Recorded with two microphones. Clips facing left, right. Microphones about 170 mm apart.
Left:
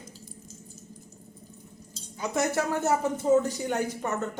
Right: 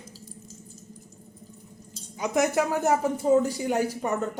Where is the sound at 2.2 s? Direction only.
15° right (ahead or behind).